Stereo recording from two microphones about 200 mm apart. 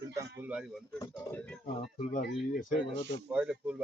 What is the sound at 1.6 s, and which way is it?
Speech, 40° left (ahead or behind).